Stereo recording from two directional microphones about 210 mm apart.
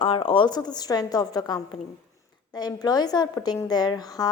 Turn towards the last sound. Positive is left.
turn(degrees=20)  # may be behind; listen again after turning